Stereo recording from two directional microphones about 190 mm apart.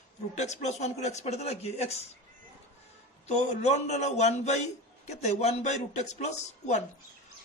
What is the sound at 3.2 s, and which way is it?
A woman's voice, 40° left (ahead or behind).